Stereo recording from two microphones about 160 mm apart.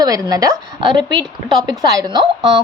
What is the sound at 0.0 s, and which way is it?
A woman's voice, 25° right (ahead or behind).